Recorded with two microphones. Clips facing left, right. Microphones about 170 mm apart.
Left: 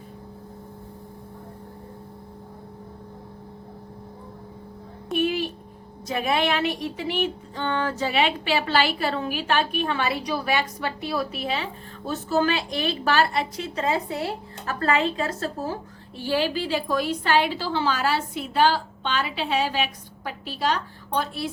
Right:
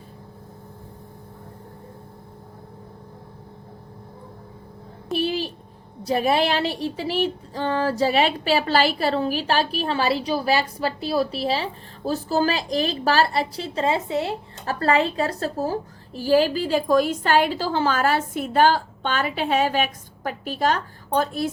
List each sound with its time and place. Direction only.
5.1 s a sound: 30° right (ahead or behind)
6.1 s speech: 35° right (ahead or behind)
14.7 s a woman's voice: 35° right (ahead or behind)